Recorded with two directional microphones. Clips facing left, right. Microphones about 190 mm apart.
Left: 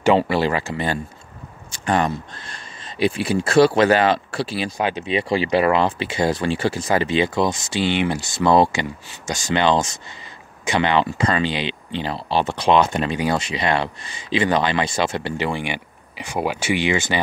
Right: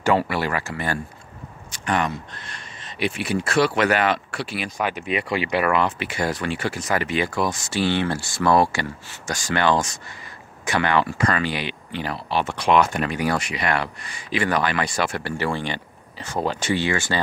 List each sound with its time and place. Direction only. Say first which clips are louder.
0.0 s speech: left 4 dB; 20° left (ahead or behind)